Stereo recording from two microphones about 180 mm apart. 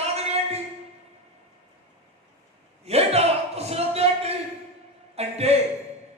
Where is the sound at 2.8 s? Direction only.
35° right (ahead or behind).